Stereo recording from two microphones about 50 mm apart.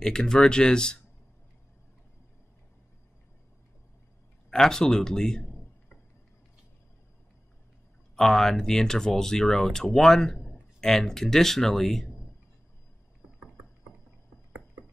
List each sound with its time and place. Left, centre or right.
0.0 s speech: centre
4.5 s speech: centre
8.2 s speech: centre